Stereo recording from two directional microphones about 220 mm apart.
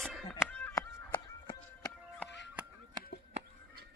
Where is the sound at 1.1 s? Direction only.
20° left (ahead or behind).